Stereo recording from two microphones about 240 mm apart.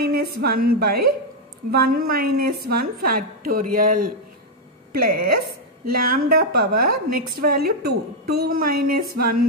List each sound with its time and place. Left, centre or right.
0.0 s a woman's voice: right
5.1 s a woman's voice: right